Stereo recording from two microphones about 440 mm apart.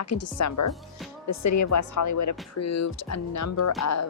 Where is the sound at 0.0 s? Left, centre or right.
Left.